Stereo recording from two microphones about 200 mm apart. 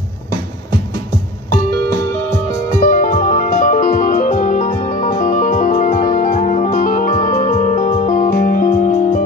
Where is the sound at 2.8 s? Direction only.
40° left (ahead or behind).